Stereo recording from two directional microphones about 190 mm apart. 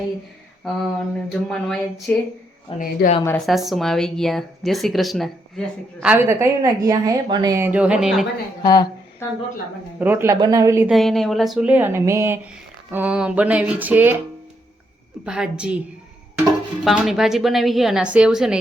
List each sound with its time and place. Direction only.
0.6 s speech: centre (ahead or behind)
2.7 s speech: 45° left (ahead or behind)
3.2 s speech: centre (ahead or behind)
8.6 s speech: 20° left (ahead or behind)
10.0 s a sound: 10° right (ahead or behind)
10.8 s speech: centre (ahead or behind)
12.9 s a sound: 5° right (ahead or behind)
15.2 s speech: 5° right (ahead or behind)